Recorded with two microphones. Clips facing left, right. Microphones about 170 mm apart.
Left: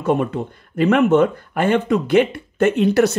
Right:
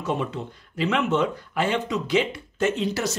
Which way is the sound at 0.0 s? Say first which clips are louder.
Left 8 dB; 55° left (ahead or behind).